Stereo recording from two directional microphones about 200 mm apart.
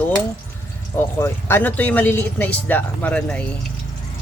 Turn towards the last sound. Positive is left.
turn(degrees=5)  # may be behind; listen again after turning